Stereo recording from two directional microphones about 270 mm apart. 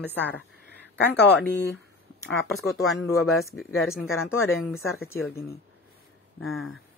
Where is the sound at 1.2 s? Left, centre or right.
Left.